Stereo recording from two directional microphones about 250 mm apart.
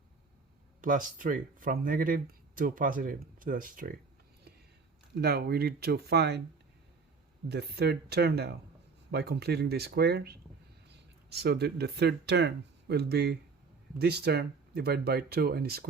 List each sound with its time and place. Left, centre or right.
0.8 s speech: right
5.1 s speech: right
7.4 s speech: right